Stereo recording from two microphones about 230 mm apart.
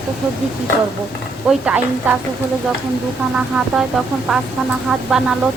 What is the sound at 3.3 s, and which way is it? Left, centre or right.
Speech, centre.